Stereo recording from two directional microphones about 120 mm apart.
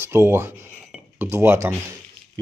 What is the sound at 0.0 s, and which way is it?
Speech, 20° right (ahead or behind).